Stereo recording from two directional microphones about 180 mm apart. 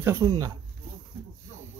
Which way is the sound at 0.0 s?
15° right (ahead or behind).